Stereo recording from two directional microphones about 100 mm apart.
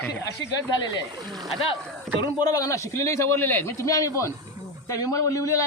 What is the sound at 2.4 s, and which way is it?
A man's voice, 35° left (ahead or behind).